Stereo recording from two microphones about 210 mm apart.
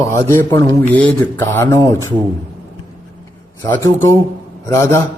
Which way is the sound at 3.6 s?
15° left (ahead or behind).